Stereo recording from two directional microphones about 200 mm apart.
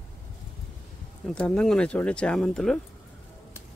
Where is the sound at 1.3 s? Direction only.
5° left (ahead or behind).